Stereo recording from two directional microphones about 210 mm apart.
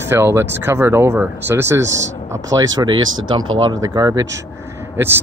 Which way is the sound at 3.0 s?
70° right (ahead or behind).